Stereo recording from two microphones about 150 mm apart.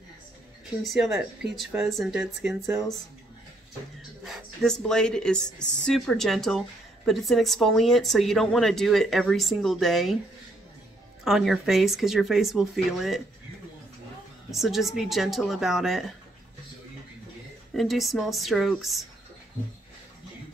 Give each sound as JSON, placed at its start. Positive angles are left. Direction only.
{"t": 0.8, "sound": "speech", "side_deg": 0}
{"t": 4.2, "sound": "speech", "side_deg": 5}
{"t": 11.2, "sound": "speech", "side_deg": 0}
{"t": 14.5, "sound": "speech", "side_deg": 0}
{"t": 17.7, "sound": "speech", "side_deg": 0}